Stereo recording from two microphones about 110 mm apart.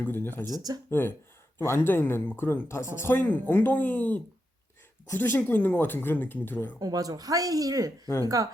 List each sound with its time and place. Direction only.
0.0 s speech: 20° left (ahead or behind)
6.7 s speech: 35° right (ahead or behind)